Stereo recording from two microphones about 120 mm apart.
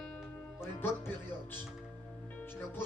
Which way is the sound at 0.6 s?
20° left (ahead or behind).